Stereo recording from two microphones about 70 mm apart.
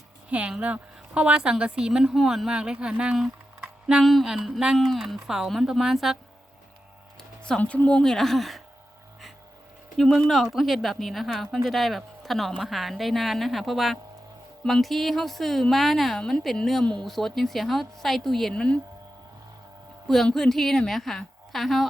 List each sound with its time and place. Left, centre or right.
0.3 s a woman's voice: centre
7.2 s a sound: centre
7.6 s speech: left; by 8.6 s centre
10.0 s a woman's voice: centre
20.1 s a woman's voice: centre